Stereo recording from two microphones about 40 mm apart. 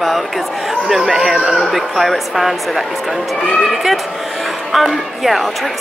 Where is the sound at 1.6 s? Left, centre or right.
Centre.